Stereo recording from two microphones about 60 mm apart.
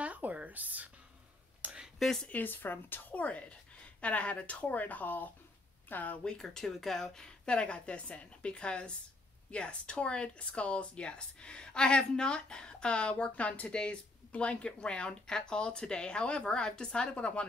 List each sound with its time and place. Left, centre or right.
0.0 s a sound: right
2.2 s a woman's voice: left
6.2 s speech: centre